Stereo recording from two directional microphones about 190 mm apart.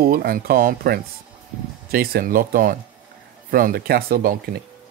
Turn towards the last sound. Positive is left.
turn(degrees=-55)  # may be behind; listen again after turning